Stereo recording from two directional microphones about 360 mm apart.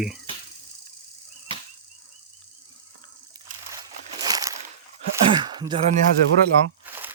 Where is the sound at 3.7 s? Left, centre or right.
Centre.